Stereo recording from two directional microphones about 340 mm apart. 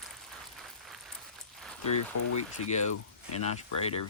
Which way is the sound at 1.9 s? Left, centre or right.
Left.